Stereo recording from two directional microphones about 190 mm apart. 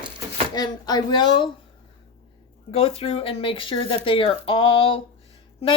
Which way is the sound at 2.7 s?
30° left (ahead or behind).